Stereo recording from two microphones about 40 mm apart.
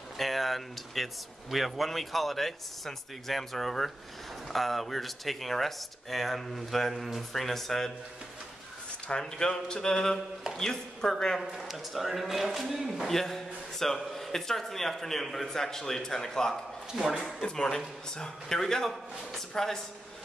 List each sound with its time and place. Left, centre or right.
0.2 s speech: centre
9.2 s a man's voice: centre
11.5 s speech: centre
13.0 s a man's voice: centre
16.9 s speech: centre
17.4 s a man's voice: centre